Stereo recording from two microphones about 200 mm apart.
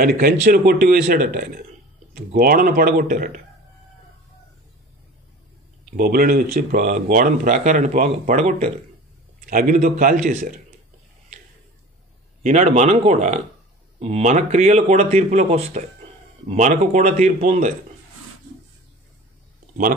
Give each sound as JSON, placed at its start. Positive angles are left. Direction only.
{"t": 0.0, "sound": "speech", "side_deg": -45}
{"t": 5.9, "sound": "speech", "side_deg": -50}
{"t": 12.4, "sound": "speech", "side_deg": -35}